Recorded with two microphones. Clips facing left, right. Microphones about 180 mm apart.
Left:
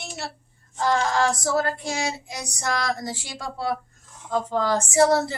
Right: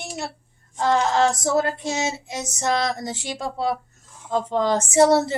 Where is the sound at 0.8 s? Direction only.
20° right (ahead or behind).